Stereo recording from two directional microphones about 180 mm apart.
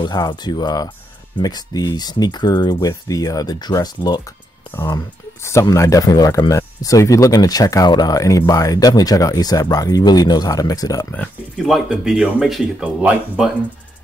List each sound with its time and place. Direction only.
0.0 s speech: 25° left (ahead or behind)
11.1 s speech: centre (ahead or behind)